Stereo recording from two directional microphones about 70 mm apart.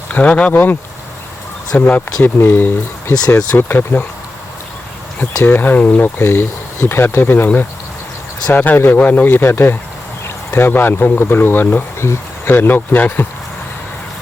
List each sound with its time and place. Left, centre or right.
0.1 s speech: centre
1.7 s speech: left
3.2 s speech: left
5.4 s speech: left
6.2 s speech: left